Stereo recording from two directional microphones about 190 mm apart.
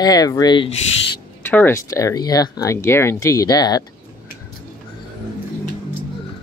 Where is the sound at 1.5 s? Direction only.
10° left (ahead or behind).